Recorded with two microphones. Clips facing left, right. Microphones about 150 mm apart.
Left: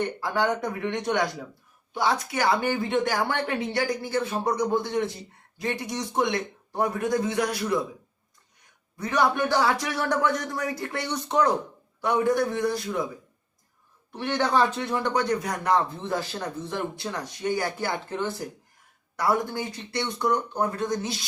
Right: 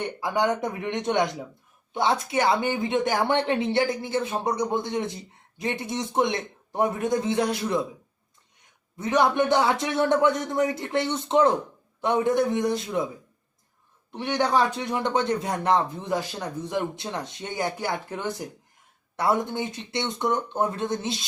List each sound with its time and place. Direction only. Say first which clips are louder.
0.2 s a woman's voice: right 5 dB; 20° right (ahead or behind)
9.0 s a woman's voice: right 2 dB; 20° right (ahead or behind)
14.1 s a woman's voice: right 1 dB; 15° right (ahead or behind)